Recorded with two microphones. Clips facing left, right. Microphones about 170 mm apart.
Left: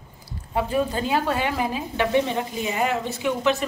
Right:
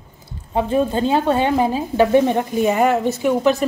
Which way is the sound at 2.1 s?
50° right (ahead or behind).